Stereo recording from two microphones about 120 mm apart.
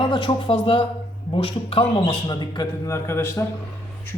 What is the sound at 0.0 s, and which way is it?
A man's voice, 40° left (ahead or behind).